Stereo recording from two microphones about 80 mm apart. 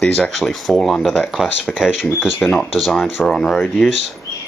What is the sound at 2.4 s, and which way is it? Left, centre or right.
Speech, centre.